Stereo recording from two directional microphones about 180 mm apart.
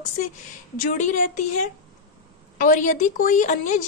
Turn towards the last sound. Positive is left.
turn(degrees=45)  # may be behind; listen again after turning